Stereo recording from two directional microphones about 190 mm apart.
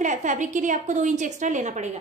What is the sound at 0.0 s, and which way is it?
A woman's voice, 40° right (ahead or behind).